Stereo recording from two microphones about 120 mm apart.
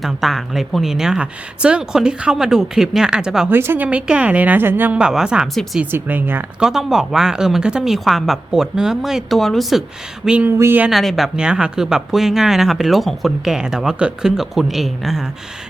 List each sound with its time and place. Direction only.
0.0 s speech: centre (ahead or behind)
3.5 s speech: 20° right (ahead or behind)
6.6 s speech: 5° right (ahead or behind)
10.8 s speech: centre (ahead or behind)